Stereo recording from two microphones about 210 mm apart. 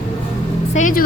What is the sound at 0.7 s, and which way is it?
Speech, 35° left (ahead or behind).